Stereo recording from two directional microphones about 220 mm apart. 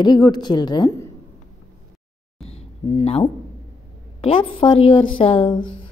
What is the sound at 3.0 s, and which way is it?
A woman's voice, 25° left (ahead or behind).